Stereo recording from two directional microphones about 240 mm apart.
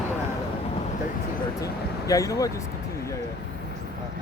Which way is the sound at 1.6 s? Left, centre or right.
Centre.